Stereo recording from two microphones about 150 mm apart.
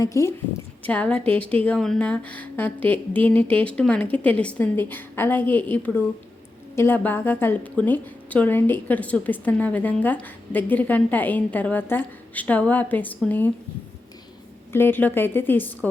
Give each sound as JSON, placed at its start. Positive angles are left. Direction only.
{"t": 0.0, "sound": "a woman's voice", "side_deg": 20}
{"t": 0.9, "sound": "a woman's voice", "side_deg": 10}
{"t": 14.7, "sound": "a woman's voice", "side_deg": 15}